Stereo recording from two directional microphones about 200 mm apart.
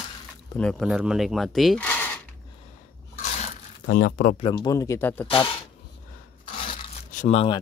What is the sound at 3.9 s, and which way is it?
Speech, 50° left (ahead or behind).